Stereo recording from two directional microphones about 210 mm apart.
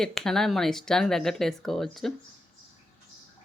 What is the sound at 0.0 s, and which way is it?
Speech, centre (ahead or behind).